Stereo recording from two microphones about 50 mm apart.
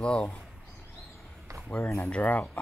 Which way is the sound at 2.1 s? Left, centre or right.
Left.